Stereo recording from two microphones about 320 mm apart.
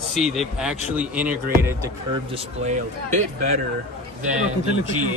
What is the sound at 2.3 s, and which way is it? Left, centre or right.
Speech, centre.